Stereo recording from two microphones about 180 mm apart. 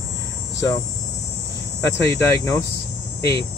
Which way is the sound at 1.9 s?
15° left (ahead or behind).